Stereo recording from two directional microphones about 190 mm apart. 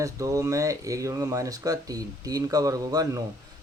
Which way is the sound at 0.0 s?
15° right (ahead or behind).